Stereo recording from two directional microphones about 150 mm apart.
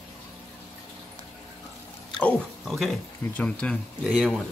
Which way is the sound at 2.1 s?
5° left (ahead or behind).